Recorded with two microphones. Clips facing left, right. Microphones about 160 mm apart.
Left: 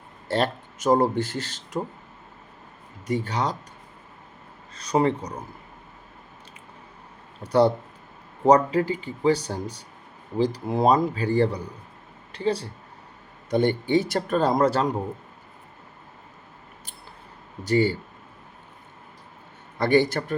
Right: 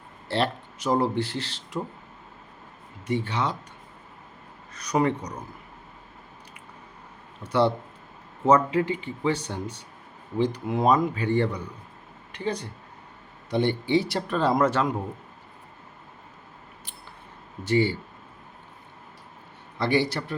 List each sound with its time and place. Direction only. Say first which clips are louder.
0.3 s speech: left 2 dB; 45° left (ahead or behind)
3.1 s speech: left 1 dB; 40° left (ahead or behind)
4.7 s speech: left 2 dB; 30° left (ahead or behind)
7.4 s speech: left 3 dB; 40° left (ahead or behind)
13.5 s speech: left 2 dB; 45° left (ahead or behind)
17.6 s speech: left 2 dB; 40° left (ahead or behind)
19.8 s speech: left 4 dB; 50° left (ahead or behind)